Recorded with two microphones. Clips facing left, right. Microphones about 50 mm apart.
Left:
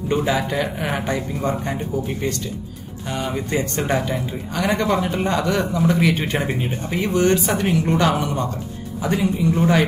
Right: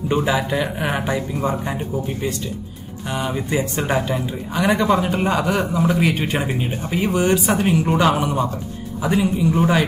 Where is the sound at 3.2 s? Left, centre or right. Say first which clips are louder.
Right 1 dB; centre.